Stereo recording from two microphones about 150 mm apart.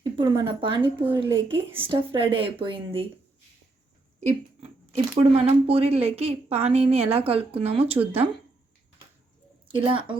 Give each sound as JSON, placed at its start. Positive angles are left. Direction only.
{"t": 0.2, "sound": "a woman's voice", "side_deg": -35}
{"t": 0.8, "sound": "speech", "side_deg": -15}
{"t": 1.2, "sound": "a woman's voice", "side_deg": -35}
{"t": 4.2, "sound": "a sound", "side_deg": -50}
{"t": 5.3, "sound": "a woman's voice", "side_deg": -40}
{"t": 9.6, "sound": "a woman's voice", "side_deg": -35}